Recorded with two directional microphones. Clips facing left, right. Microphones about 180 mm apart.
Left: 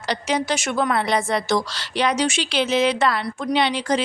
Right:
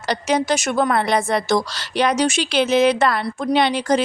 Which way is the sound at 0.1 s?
45° right (ahead or behind).